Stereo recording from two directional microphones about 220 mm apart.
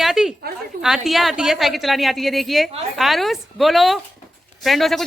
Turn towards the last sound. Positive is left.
turn(degrees=0)  # may be behind; listen again after turning